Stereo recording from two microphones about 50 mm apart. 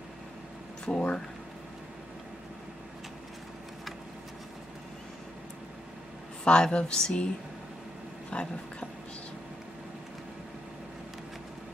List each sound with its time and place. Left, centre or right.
0.8 s speech: centre
6.4 s speech: centre
8.3 s speech: left